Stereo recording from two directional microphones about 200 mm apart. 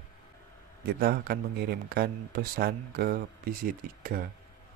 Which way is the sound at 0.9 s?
50° right (ahead or behind).